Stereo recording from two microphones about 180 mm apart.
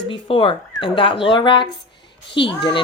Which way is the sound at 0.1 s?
30° left (ahead or behind).